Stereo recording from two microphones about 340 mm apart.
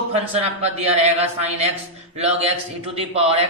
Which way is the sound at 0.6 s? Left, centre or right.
Centre.